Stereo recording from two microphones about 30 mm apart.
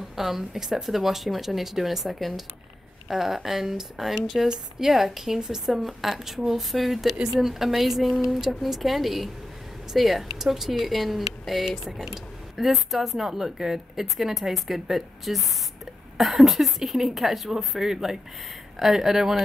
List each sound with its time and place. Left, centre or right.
0.2 s a woman's voice: centre